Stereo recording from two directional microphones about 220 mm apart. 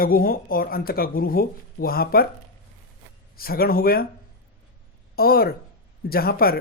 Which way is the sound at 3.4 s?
40° left (ahead or behind).